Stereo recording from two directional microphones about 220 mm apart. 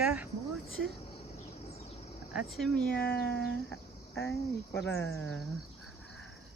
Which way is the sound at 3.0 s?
45° left (ahead or behind).